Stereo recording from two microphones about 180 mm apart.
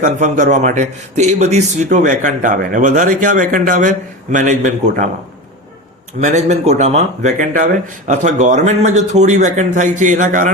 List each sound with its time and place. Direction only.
0.0 s a man's voice: 45° right (ahead or behind)
6.1 s speech: 40° right (ahead or behind)